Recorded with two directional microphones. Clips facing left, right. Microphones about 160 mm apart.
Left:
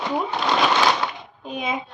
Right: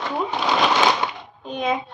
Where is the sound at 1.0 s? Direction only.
20° right (ahead or behind).